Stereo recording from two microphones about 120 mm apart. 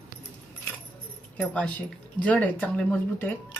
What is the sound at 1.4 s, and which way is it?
Speech, 10° left (ahead or behind).